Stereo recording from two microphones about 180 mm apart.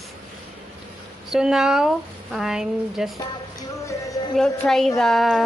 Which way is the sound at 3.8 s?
20° left (ahead or behind).